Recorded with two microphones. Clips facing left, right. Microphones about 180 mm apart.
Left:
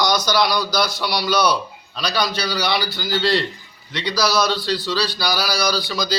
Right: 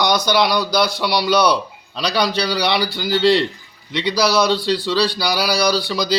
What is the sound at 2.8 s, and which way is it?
Speech, 65° right (ahead or behind).